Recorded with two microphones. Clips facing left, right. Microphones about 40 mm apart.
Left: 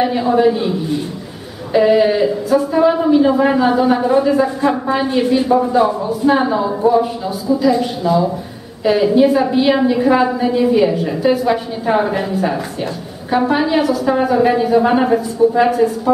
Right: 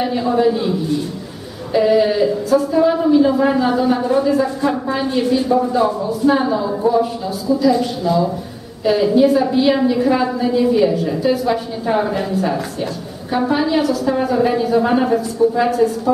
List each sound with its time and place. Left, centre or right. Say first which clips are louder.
0.0 s a woman's voice: left 3 dB; centre